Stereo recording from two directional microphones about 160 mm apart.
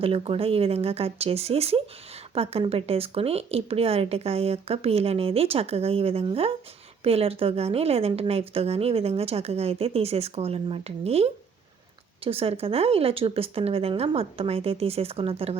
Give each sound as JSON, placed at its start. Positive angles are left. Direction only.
{"t": 0.0, "sound": "a woman's voice", "side_deg": -35}